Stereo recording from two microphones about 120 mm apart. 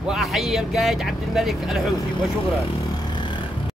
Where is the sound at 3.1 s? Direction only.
40° left (ahead or behind).